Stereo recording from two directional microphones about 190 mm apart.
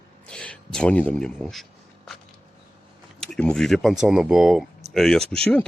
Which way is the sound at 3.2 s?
5° left (ahead or behind).